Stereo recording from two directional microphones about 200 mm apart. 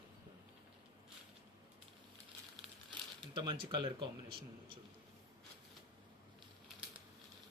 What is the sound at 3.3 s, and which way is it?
Speech, 25° right (ahead or behind).